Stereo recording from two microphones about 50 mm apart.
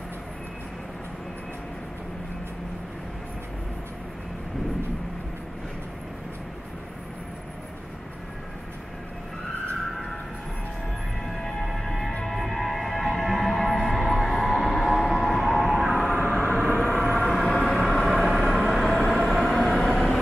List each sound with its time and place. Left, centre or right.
11.2 s music: centre
15.7 s vehicle: centre
16.6 s vehicle: left
17.0 s vehicle: centre